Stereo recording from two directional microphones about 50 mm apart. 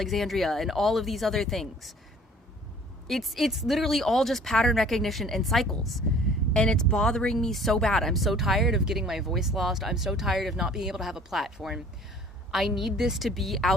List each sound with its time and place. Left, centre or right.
0.0 s speech: centre
3.1 s speech: centre
6.5 s speech: centre
7.4 s speech: centre